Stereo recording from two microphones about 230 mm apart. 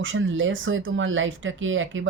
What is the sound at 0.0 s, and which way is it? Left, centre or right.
Speech, right.